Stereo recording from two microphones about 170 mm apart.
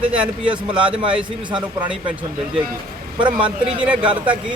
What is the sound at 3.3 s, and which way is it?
Speech, 5° right (ahead or behind).